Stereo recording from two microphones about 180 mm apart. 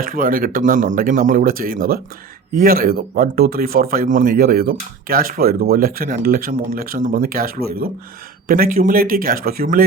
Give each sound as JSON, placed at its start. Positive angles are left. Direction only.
{"t": 0.0, "sound": "speech", "side_deg": -50}